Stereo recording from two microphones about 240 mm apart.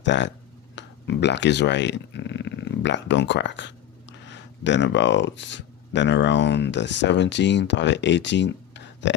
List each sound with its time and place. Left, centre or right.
0.0 s speech: left